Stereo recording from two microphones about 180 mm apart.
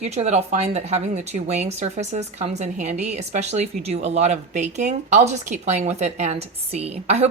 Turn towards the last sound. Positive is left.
turn(degrees=-35)  # may be behind; listen again after turning